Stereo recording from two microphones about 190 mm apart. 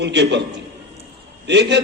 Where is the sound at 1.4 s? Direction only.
65° right (ahead or behind).